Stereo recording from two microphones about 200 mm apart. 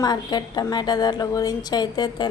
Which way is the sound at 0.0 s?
20° left (ahead or behind).